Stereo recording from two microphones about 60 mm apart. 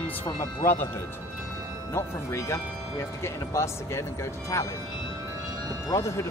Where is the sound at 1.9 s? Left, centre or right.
Left.